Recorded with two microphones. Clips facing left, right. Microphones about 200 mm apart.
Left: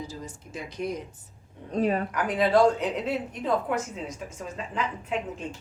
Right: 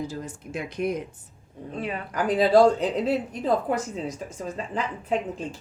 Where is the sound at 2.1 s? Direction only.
35° right (ahead or behind).